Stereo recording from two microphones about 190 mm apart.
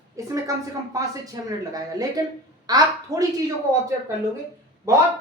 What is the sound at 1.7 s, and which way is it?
A woman's voice, 20° right (ahead or behind).